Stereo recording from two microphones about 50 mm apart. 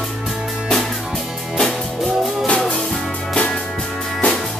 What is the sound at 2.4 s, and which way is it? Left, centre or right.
Music, left.